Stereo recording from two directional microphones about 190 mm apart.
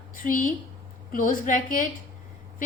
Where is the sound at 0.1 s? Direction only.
45° left (ahead or behind).